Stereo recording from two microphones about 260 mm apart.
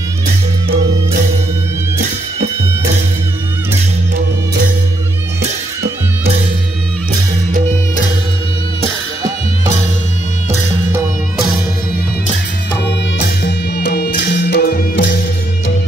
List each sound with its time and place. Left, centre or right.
13.2 s music: left